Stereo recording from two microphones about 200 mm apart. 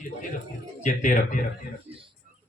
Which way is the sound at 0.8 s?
40° left (ahead or behind).